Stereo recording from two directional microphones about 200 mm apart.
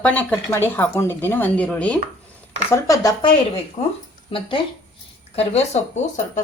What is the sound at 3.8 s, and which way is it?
A woman's voice, 30° left (ahead or behind).